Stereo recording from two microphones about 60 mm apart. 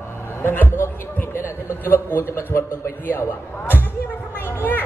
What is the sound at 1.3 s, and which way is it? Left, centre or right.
A man's voice, left.